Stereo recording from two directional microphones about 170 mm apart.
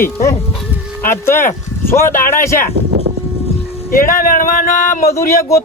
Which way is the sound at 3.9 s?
55° left (ahead or behind).